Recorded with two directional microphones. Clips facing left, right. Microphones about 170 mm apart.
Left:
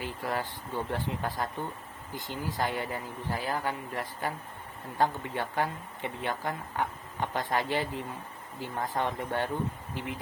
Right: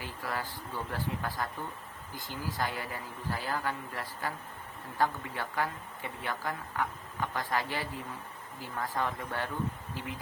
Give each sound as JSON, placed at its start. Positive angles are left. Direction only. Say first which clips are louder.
{"t": 0.0, "sound": "speech", "louder": "left 4 dB", "side_deg": 20}